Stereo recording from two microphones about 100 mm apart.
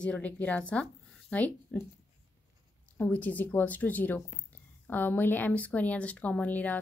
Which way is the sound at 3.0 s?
15° left (ahead or behind).